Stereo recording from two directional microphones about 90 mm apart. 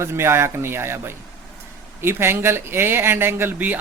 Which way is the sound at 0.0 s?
30° right (ahead or behind).